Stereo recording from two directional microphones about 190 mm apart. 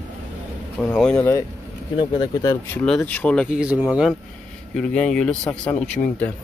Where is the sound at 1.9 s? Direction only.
25° left (ahead or behind); by 3.4 s 5° left (ahead or behind).